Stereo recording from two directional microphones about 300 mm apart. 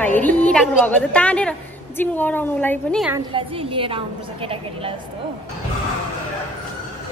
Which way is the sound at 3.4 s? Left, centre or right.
Centre.